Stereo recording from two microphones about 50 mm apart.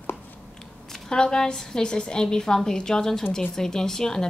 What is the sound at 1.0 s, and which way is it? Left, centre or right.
A woman's voice, centre.